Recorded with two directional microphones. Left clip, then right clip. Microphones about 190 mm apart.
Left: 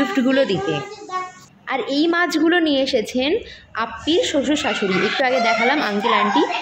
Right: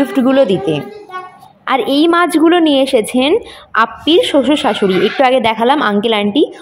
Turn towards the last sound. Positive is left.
turn(degrees=-30)  # may be behind; listen again after turning